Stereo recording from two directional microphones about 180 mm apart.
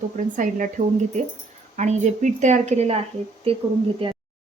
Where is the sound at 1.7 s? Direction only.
40° right (ahead or behind).